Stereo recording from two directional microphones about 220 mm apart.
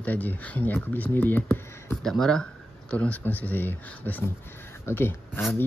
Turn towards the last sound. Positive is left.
turn(degrees=10)  # may be behind; listen again after turning